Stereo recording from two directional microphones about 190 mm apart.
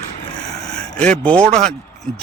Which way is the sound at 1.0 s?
5° left (ahead or behind).